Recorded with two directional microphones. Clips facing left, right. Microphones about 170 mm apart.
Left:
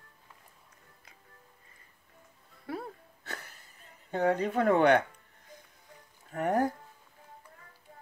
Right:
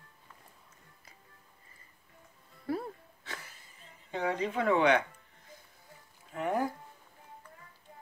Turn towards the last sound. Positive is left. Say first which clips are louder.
# left 3 dB
turn(degrees=45)  # may be behind; listen again after turning